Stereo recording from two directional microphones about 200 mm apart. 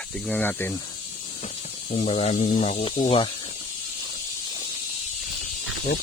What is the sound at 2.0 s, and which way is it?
Speech, 35° left (ahead or behind).